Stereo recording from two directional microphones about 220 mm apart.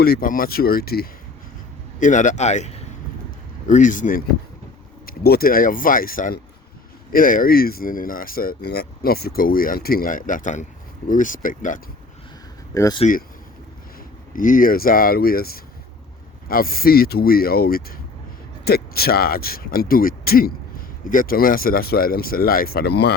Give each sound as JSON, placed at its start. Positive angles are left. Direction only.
{"t": 0.0, "sound": "speech", "side_deg": 40}
{"t": 12.7, "sound": "speech", "side_deg": 15}
{"t": 13.0, "sound": "speech", "side_deg": 35}
{"t": 14.3, "sound": "speech", "side_deg": 40}